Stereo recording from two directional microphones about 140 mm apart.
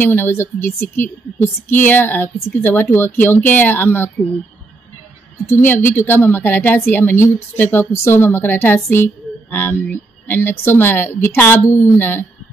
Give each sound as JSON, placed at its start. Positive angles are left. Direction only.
{"t": 0.0, "sound": "speech", "side_deg": 15}
{"t": 5.5, "sound": "speech", "side_deg": 15}